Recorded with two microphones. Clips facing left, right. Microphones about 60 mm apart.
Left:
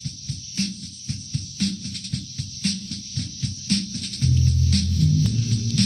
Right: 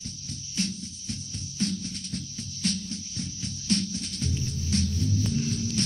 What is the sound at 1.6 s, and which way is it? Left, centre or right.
Music, left.